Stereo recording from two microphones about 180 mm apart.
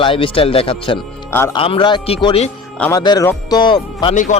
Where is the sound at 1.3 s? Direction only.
15° left (ahead or behind).